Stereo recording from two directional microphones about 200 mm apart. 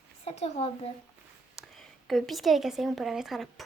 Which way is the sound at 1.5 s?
Centre (ahead or behind).